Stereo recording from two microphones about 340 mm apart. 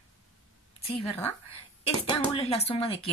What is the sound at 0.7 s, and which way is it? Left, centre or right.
A woman's voice, centre.